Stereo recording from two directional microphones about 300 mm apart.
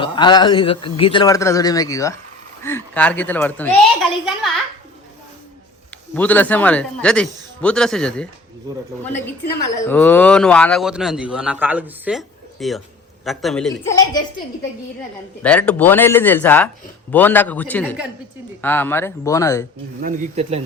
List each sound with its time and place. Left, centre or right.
0.0 s a man's voice: centre
6.1 s a man's voice: centre
9.9 s a man's voice: centre
15.4 s a man's voice: centre
20.0 s speech: right